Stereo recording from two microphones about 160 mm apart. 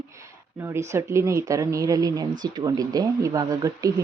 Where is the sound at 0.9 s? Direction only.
20° right (ahead or behind).